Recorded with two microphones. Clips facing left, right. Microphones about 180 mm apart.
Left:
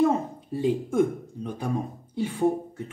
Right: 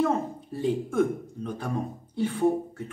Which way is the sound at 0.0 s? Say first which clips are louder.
Left 3 dB; 15° left (ahead or behind).